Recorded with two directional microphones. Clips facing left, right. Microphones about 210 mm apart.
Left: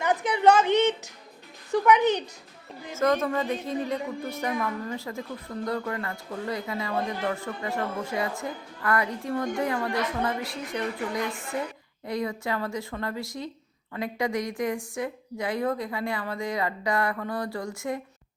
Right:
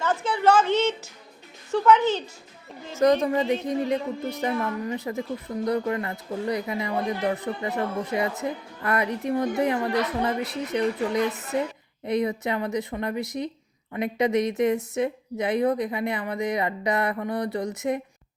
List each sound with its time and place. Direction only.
0.0 s a sound: 15° left (ahead or behind)
1.7 s speech: 15° left (ahead or behind)
2.9 s a woman's voice: 15° right (ahead or behind)